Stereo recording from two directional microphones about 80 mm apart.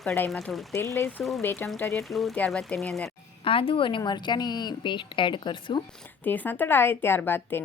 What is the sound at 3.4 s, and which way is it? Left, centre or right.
A woman's voice, left.